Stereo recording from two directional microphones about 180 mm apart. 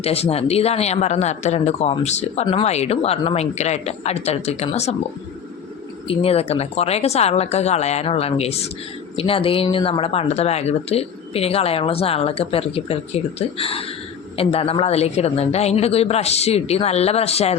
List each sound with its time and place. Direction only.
0.0 s speech: 35° left (ahead or behind)
6.1 s speech: 35° left (ahead or behind)